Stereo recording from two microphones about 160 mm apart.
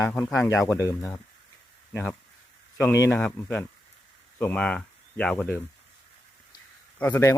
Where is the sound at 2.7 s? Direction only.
15° left (ahead or behind).